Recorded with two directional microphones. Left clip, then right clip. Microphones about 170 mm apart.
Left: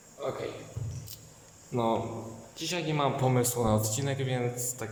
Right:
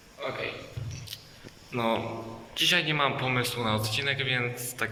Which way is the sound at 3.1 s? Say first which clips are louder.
Even; 40° left (ahead or behind).